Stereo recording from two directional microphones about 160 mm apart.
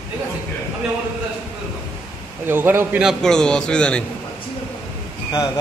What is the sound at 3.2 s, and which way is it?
Speech, 5° left (ahead or behind).